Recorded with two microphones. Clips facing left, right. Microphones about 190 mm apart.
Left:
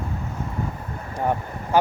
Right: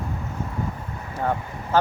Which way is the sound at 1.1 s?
15° left (ahead or behind).